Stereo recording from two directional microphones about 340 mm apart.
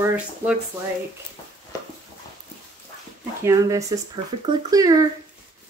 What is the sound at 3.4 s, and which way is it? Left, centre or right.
Speech, centre.